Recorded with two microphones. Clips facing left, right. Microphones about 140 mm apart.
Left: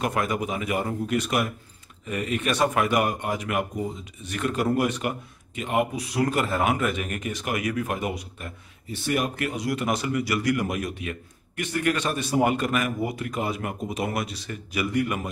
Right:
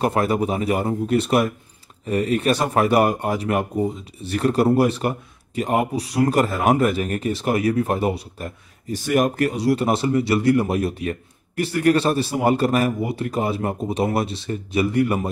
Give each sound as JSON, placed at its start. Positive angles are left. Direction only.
{"t": 0.0, "sound": "speech", "side_deg": -35}